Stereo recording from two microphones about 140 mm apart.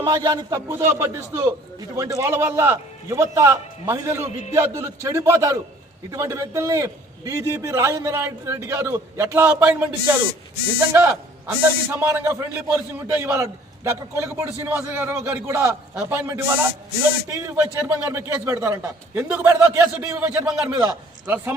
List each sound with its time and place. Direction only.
0.0 s a man's voice: 25° right (ahead or behind); by 21.5 s 10° right (ahead or behind)